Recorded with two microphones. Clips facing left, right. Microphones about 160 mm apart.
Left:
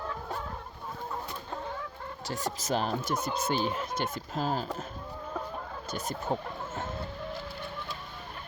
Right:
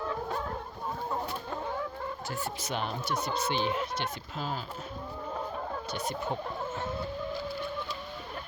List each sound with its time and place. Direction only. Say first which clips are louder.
2.3 s speech: left 7 dB; 40° left (ahead or behind)
5.9 s speech: left 2 dB; 45° left (ahead or behind)